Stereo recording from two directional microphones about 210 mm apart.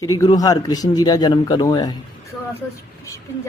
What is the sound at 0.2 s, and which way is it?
A man's voice, 15° left (ahead or behind).